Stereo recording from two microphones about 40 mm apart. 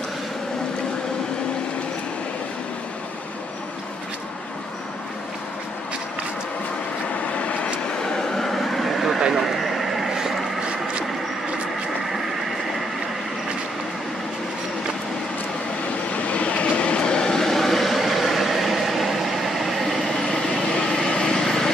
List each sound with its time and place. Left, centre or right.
7.3 s vehicle: left
7.8 s vehicle: centre
10.6 s a sound: right
12.1 s vehicle: centre
16.1 s train: left
17.4 s vehicle: centre
20.0 s vehicle: centre